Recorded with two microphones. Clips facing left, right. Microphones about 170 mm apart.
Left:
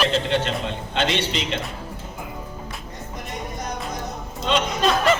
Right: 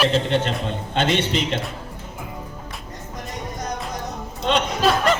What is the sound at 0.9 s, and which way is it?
Speech, 50° right (ahead or behind).